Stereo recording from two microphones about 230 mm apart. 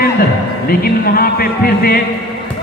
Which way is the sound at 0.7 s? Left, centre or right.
Left.